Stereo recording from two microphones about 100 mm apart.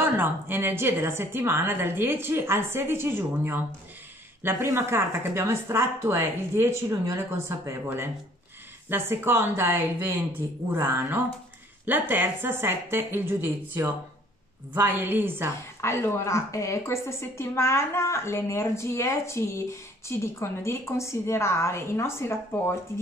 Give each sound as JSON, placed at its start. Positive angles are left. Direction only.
{"t": 0.0, "sound": "speech", "side_deg": -20}
{"t": 15.8, "sound": "a woman's voice", "side_deg": 25}